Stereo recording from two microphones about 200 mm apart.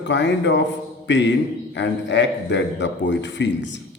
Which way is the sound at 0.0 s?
60° left (ahead or behind).